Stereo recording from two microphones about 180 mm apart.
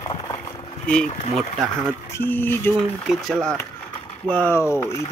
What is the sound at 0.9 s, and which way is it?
Speech, 5° left (ahead or behind).